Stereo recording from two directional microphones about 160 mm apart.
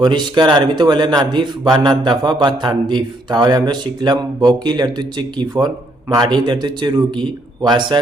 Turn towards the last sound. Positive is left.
turn(degrees=-30)  # may be behind; listen again after turning